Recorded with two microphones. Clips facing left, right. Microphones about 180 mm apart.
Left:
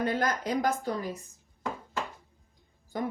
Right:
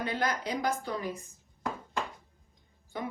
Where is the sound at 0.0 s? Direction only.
45° left (ahead or behind).